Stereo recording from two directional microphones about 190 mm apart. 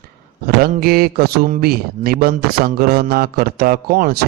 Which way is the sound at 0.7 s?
50° right (ahead or behind).